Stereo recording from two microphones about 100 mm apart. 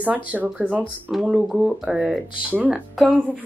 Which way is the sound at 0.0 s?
15° right (ahead or behind).